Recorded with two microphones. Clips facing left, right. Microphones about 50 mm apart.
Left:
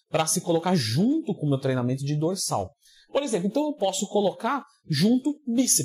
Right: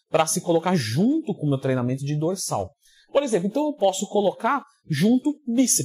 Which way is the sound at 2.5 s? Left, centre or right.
Centre.